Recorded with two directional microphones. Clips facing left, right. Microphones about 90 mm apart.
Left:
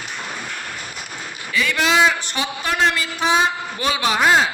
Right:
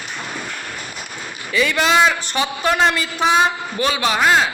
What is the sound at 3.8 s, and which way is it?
Speech, 20° left (ahead or behind).